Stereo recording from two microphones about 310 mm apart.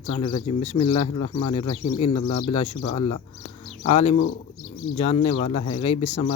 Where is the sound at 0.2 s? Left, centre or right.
Centre.